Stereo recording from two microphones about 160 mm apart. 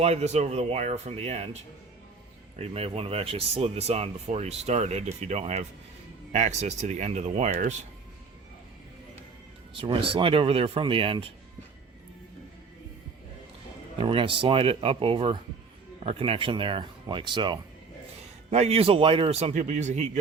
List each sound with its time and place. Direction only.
0.0 s speech: 40° right (ahead or behind)
2.6 s speech: 40° right (ahead or behind)
9.7 s speech: 35° right (ahead or behind)
14.0 s speech: 35° right (ahead or behind)
18.5 s speech: 40° right (ahead or behind)